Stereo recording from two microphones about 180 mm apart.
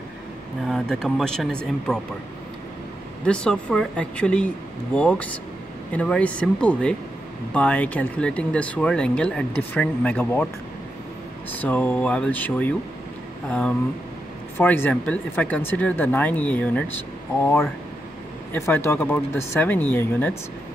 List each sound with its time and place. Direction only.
0.7 s speech: 5° left (ahead or behind)
3.3 s speech: 5° left (ahead or behind)
11.6 s speech: 10° left (ahead or behind)